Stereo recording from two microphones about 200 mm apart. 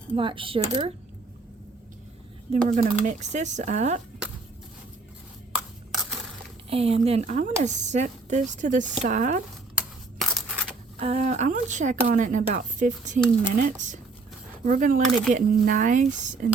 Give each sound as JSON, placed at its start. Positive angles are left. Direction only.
{"t": 0.1, "sound": "speech", "side_deg": -25}
{"t": 2.6, "sound": "speech", "side_deg": -40}
{"t": 5.5, "sound": "a sound", "side_deg": 0}
{"t": 6.7, "sound": "speech", "side_deg": -30}
{"t": 9.7, "sound": "crushing", "side_deg": 0}
{"t": 11.0, "sound": "speech", "side_deg": -35}